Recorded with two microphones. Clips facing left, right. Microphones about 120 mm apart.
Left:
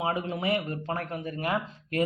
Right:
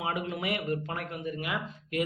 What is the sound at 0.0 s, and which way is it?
Speech, 30° left (ahead or behind).